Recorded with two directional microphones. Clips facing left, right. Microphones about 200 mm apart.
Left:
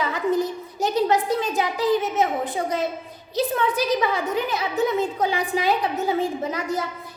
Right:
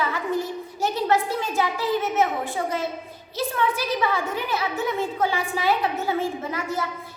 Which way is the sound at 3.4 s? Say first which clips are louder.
Left 3 dB; 20° left (ahead or behind).